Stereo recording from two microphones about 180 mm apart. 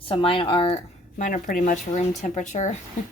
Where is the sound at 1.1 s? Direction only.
45° left (ahead or behind).